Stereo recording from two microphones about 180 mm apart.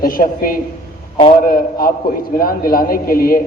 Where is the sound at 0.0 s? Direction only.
55° left (ahead or behind).